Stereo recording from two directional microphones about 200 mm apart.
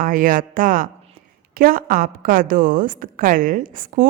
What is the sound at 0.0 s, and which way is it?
A woman's voice, 45° right (ahead or behind).